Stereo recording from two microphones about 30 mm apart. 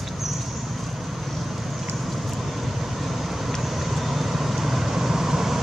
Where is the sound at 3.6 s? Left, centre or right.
Centre.